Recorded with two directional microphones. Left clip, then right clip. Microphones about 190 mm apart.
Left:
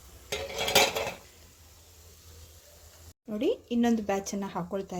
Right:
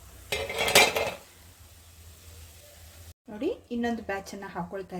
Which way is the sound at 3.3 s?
40° left (ahead or behind).